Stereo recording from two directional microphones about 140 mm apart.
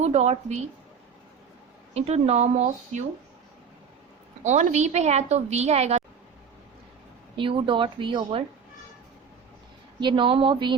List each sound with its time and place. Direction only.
0.0 s a woman's voice: 55° right (ahead or behind)
1.9 s a woman's voice: 50° right (ahead or behind)
4.4 s a woman's voice: 55° right (ahead or behind)
7.3 s speech: 40° right (ahead or behind)
10.0 s speech: 35° right (ahead or behind)